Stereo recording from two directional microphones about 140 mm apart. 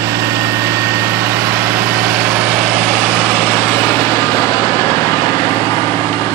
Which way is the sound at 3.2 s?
10° left (ahead or behind).